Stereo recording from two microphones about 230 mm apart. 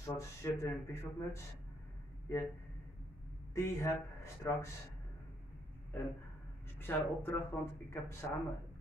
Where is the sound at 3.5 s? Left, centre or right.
Centre.